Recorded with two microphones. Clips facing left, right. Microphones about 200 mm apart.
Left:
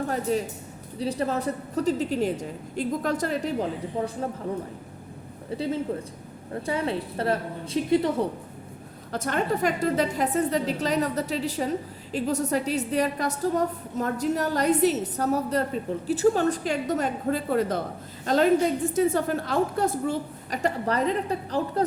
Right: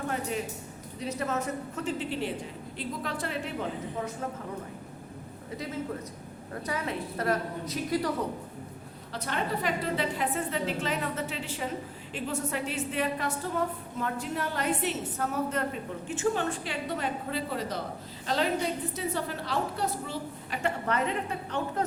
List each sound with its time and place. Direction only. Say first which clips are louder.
0.1 s a sound: left 6 dB; 35° left (ahead or behind)
0.9 s a woman's voice: left 5 dB; 35° left (ahead or behind)
5.5 s a woman's voice: left 7 dB; 30° left (ahead or behind)
9.1 s a woman's voice: left 6 dB; 45° left (ahead or behind)